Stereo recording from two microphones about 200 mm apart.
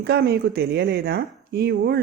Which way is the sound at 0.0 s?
55° right (ahead or behind).